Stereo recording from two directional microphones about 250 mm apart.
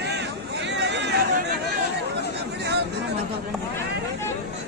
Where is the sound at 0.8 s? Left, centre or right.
Right.